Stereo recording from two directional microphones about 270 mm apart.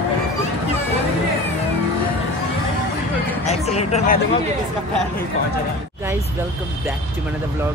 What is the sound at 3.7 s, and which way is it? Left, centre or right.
Speech, left.